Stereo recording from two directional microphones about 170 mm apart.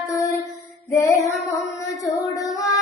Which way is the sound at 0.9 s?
15° left (ahead or behind).